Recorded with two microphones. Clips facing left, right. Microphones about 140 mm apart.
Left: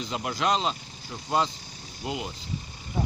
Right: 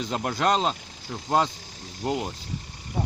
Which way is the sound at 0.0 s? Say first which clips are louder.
Right 3 dB; 50° right (ahead or behind).